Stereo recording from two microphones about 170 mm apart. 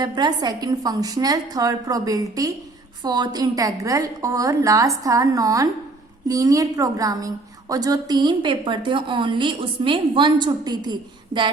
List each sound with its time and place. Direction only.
0.0 s a woman's voice: 25° right (ahead or behind)